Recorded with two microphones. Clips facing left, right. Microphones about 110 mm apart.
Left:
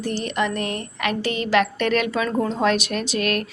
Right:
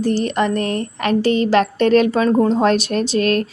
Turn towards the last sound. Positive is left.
turn(degrees=-35)  # may be behind; listen again after turning